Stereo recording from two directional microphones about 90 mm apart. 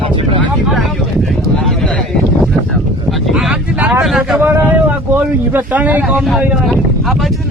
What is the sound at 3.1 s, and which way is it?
Speech, 5° right (ahead or behind).